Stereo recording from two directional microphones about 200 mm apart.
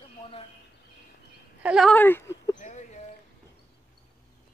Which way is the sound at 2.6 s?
35° left (ahead or behind).